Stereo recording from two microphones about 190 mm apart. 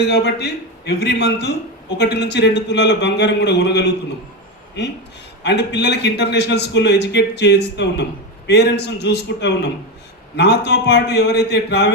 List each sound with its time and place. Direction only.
0.1 s a man's voice: 60° left (ahead or behind)
5.4 s a man's voice: 65° left (ahead or behind)